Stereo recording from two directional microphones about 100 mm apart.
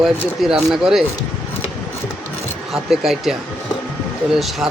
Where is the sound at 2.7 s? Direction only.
5° right (ahead or behind).